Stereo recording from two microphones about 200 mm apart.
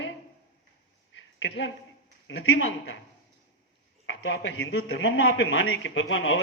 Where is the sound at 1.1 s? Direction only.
65° left (ahead or behind).